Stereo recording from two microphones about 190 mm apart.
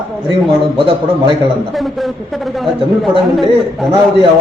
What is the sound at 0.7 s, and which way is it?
Speech, 25° right (ahead or behind).